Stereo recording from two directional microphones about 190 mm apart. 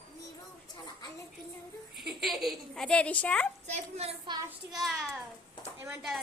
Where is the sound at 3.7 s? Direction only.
35° right (ahead or behind).